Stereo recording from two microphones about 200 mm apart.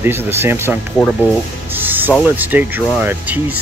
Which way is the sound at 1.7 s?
10° right (ahead or behind).